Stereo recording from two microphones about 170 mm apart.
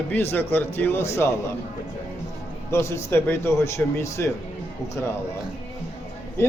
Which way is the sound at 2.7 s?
15° left (ahead or behind).